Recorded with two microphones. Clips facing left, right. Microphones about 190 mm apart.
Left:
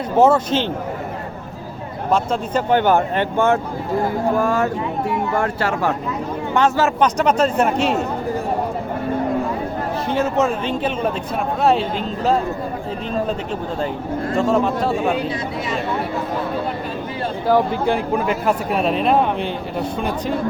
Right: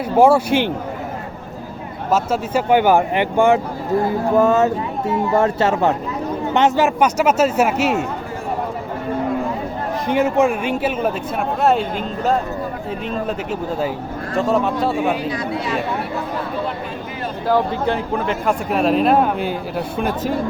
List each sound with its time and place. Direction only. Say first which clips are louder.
0.2 s speech: right 2 dB; 10° right (ahead or behind)
2.0 s speech: right 1 dB; 5° right (ahead or behind)
10.1 s speech: right 3 dB; 15° right (ahead or behind)
17.5 s speech: left 1 dB; 10° left (ahead or behind); by 20.3 s 5° right (ahead or behind)